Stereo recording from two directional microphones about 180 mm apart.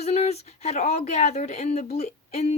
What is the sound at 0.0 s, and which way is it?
Speech, 35° left (ahead or behind).